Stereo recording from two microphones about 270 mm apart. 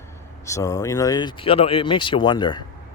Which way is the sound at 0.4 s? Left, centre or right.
Centre.